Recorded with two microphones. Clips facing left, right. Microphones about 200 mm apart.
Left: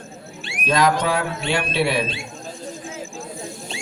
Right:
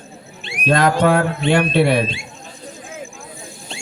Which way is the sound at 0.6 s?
55° right (ahead or behind).